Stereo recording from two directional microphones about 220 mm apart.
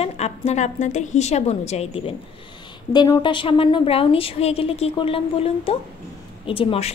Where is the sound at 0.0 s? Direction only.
30° left (ahead or behind).